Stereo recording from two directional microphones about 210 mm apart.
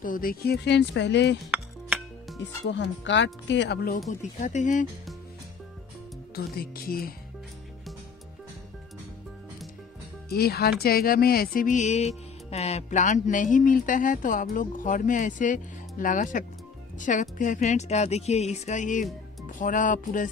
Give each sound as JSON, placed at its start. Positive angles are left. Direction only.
{"t": 0.0, "sound": "speech", "side_deg": 40}
{"t": 1.5, "sound": "music", "side_deg": -5}
{"t": 2.4, "sound": "speech", "side_deg": 60}
{"t": 4.1, "sound": "music", "side_deg": 35}
{"t": 6.3, "sound": "speech", "side_deg": 45}
{"t": 10.3, "sound": "speech", "side_deg": 50}
{"t": 10.8, "sound": "music", "side_deg": 45}
{"t": 19.4, "sound": "speech", "side_deg": 40}